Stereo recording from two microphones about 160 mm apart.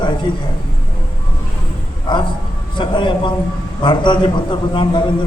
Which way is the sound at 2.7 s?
30° left (ahead or behind).